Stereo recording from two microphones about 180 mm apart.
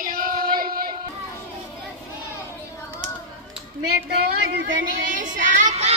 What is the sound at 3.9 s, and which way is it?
Speech, 65° right (ahead or behind).